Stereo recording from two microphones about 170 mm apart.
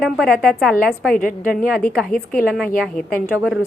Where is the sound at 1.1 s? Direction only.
55° left (ahead or behind).